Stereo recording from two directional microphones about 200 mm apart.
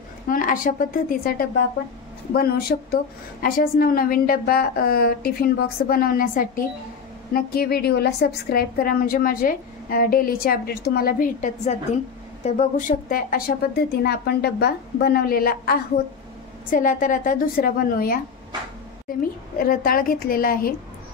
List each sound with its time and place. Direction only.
0.3 s a woman's voice: 45° left (ahead or behind)